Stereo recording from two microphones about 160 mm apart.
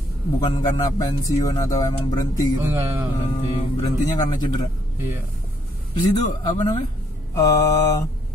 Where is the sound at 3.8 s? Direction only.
25° left (ahead or behind).